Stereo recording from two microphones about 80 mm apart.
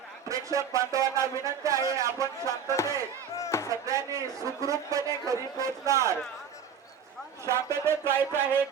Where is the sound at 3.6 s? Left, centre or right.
Right.